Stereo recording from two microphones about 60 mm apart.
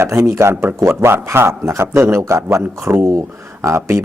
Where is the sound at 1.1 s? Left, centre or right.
Right.